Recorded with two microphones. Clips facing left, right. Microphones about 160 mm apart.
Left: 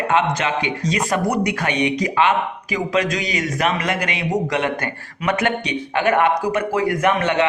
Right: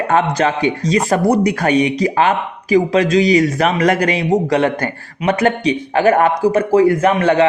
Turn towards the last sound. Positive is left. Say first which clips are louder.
# right 5 dB
turn(degrees=-30)  # may be behind; listen again after turning